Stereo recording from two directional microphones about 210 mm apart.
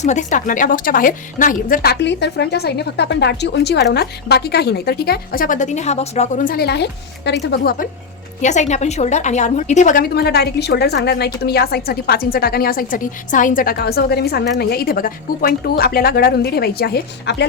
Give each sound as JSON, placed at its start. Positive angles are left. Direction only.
{"t": 0.0, "sound": "a woman's voice", "side_deg": 35}
{"t": 8.4, "sound": "a woman's voice", "side_deg": 35}